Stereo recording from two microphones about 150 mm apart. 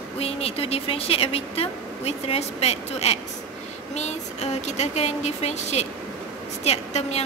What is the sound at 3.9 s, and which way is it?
Speech, 50° left (ahead or behind).